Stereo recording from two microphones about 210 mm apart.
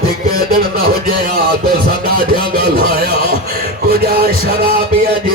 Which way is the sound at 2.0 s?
45° right (ahead or behind).